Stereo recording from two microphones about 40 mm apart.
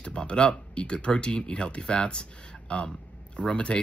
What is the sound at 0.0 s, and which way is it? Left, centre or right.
Speech, left.